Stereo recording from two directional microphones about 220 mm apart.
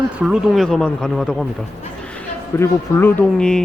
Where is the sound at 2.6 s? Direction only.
10° left (ahead or behind).